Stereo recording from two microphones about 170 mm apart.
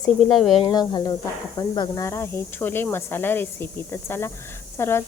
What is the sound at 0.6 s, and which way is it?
Speech, 25° left (ahead or behind).